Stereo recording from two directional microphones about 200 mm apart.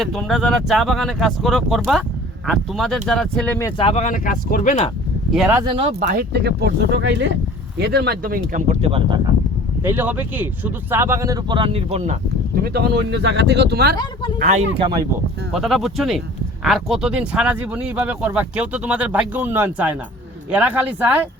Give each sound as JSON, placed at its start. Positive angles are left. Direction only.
{"t": 0.0, "sound": "speech", "side_deg": 0}
{"t": 3.8, "sound": "speech", "side_deg": 25}
{"t": 4.0, "sound": "speech", "side_deg": 40}
{"t": 5.3, "sound": "speech", "side_deg": -5}
{"t": 5.5, "sound": "speech", "side_deg": -25}
{"t": 6.1, "sound": "speech", "side_deg": -55}
{"t": 9.8, "sound": "speech", "side_deg": -10}
{"t": 12.5, "sound": "speech", "side_deg": -50}
{"t": 14.0, "sound": "speech", "side_deg": 25}
{"t": 14.3, "sound": "speech", "side_deg": -40}
{"t": 14.8, "sound": "speech", "side_deg": -20}
{"t": 15.5, "sound": "speech", "side_deg": 0}